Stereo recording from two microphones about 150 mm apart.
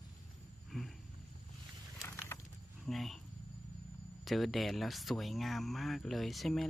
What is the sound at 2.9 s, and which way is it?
Speech, centre (ahead or behind).